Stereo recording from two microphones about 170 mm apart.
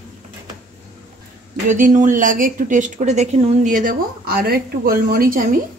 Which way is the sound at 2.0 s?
50° right (ahead or behind).